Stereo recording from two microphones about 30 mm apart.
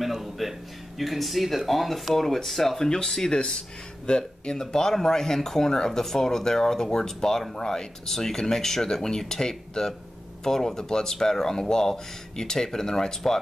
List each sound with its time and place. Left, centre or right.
0.0 s speech: centre
2.8 s speech: left